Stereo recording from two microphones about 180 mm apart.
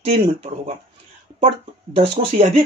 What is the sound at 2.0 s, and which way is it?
Speech, 35° right (ahead or behind).